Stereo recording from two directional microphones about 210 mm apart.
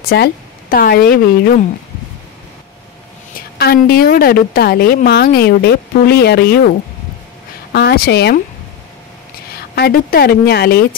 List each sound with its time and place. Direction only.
0.1 s a woman's voice: 45° left (ahead or behind)
3.3 s a woman's voice: 45° left (ahead or behind)
7.7 s a woman's voice: 45° left (ahead or behind)
9.8 s a woman's voice: 45° left (ahead or behind)